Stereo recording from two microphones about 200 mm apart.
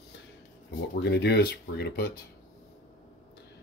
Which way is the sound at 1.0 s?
60° left (ahead or behind).